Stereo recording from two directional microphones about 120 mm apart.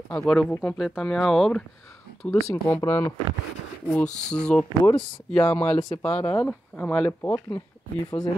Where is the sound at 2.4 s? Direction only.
20° left (ahead or behind).